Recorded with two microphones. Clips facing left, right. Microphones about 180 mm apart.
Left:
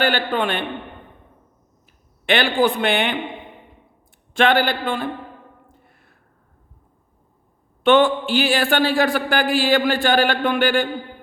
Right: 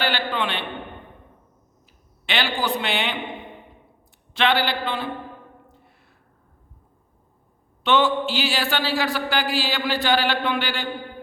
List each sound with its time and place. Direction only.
0.0 s a man's voice: 45° left (ahead or behind)
2.2 s a man's voice: 55° left (ahead or behind)
4.4 s a man's voice: 50° left (ahead or behind)
7.9 s a man's voice: 55° left (ahead or behind)